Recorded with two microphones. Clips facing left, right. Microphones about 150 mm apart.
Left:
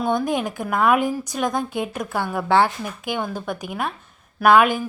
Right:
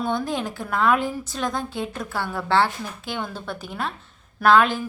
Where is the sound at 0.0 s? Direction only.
15° left (ahead or behind).